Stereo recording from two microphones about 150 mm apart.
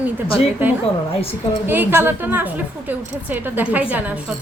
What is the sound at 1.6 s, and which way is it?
A woman's voice, 15° right (ahead or behind).